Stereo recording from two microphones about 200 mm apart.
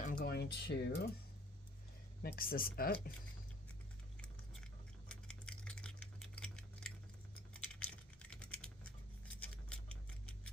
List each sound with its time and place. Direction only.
0.0 s speech: 45° left (ahead or behind)
2.2 s speech: 50° left (ahead or behind)
4.2 s a sound: 5° left (ahead or behind)
7.8 s typing: 5° left (ahead or behind)